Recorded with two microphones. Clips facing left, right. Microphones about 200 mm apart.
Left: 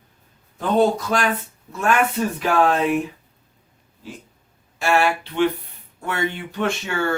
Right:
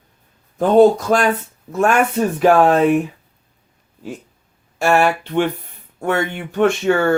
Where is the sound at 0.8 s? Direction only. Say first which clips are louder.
Right 7 dB; 45° right (ahead or behind).